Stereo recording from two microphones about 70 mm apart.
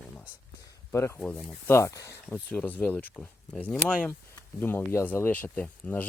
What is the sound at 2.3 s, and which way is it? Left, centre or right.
Speech, left.